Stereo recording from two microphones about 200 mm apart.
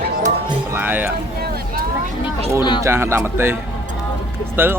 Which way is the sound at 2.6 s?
20° left (ahead or behind).